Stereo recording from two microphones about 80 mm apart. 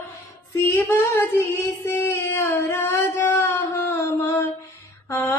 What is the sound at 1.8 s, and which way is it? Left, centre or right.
Female singing, left.